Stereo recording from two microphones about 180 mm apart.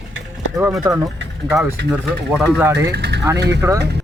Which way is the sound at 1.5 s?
10° right (ahead or behind).